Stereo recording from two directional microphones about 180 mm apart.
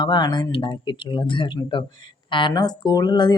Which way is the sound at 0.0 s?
25° left (ahead or behind).